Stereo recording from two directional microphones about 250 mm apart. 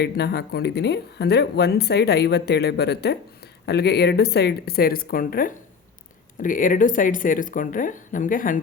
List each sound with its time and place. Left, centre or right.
0.0 s speech: left